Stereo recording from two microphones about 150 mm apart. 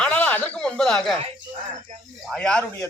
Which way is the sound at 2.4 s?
10° left (ahead or behind).